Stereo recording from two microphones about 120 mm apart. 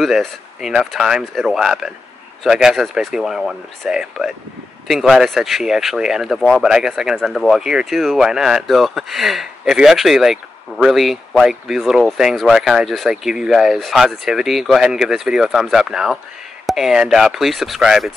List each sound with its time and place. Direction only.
0.0 s speech: centre (ahead or behind)